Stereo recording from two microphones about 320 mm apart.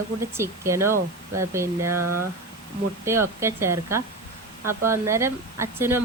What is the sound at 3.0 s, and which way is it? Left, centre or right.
A woman's voice, centre.